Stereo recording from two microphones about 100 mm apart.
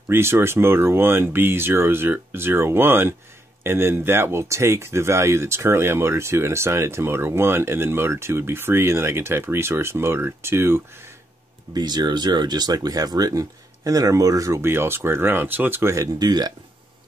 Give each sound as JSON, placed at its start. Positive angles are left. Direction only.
{"t": 0.1, "sound": "speech", "side_deg": -25}
{"t": 11.7, "sound": "speech", "side_deg": -45}
{"t": 16.2, "sound": "speech", "side_deg": -40}